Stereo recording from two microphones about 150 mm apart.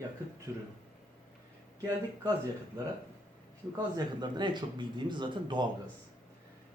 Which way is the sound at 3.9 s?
30° right (ahead or behind).